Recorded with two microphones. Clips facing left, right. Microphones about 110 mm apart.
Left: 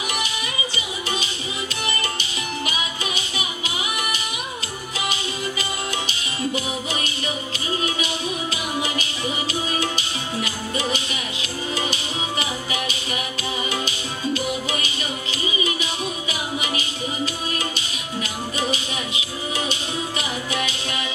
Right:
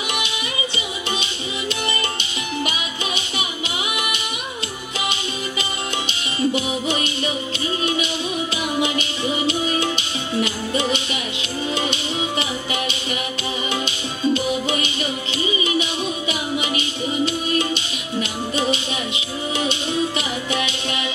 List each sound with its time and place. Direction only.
4.9 s music: 25° right (ahead or behind)
8.8 s music: 25° right (ahead or behind)